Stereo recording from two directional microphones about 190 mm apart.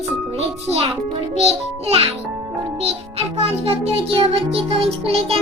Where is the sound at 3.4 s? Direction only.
30° right (ahead or behind).